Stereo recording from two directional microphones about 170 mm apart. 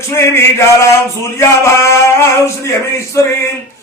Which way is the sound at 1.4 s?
15° left (ahead or behind).